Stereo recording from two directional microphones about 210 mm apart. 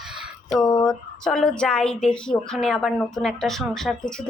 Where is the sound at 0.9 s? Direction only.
5° left (ahead or behind).